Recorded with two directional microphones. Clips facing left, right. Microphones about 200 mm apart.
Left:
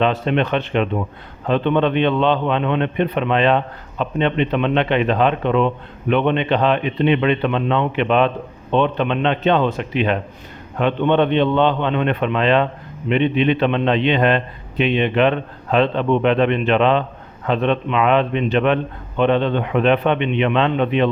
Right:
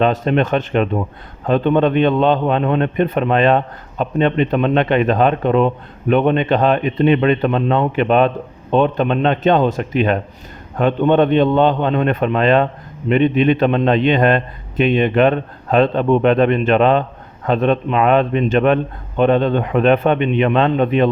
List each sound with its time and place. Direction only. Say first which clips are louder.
0.0 s a man's voice: right 3 dB; 45° right (ahead or behind)